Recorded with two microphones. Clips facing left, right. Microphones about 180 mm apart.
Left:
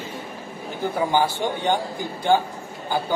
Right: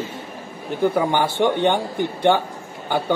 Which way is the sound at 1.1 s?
65° right (ahead or behind).